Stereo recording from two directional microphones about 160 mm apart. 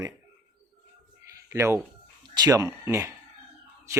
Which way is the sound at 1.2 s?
15° right (ahead or behind).